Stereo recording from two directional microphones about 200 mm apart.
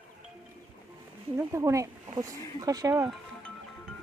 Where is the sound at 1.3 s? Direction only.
15° right (ahead or behind).